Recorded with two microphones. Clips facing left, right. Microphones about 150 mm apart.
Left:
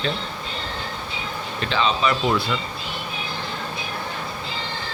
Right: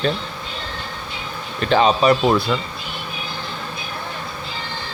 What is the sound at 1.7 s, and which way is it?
Speech, 45° right (ahead or behind).